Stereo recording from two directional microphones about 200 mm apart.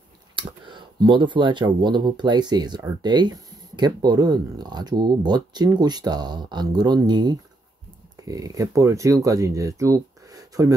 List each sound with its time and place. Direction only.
0.4 s speech: 25° right (ahead or behind)